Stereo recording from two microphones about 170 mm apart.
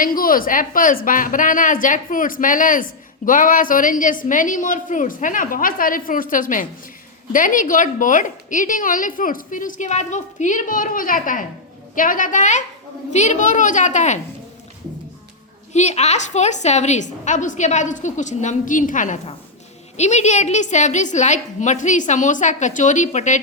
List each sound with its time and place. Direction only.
0.0 s a woman's voice: 55° left (ahead or behind)
15.7 s a woman's voice: 40° left (ahead or behind)